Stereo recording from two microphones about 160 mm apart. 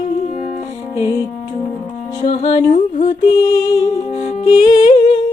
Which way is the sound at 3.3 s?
20° left (ahead or behind).